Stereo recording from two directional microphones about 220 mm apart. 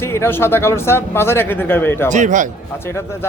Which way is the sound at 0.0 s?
10° left (ahead or behind).